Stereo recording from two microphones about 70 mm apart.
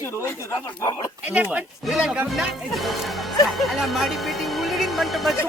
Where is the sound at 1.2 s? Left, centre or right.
Centre.